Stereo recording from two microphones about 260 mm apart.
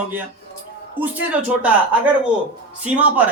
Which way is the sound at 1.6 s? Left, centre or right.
Centre.